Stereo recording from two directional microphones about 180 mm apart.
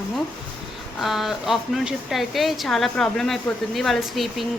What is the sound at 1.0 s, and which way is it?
Speech, centre (ahead or behind).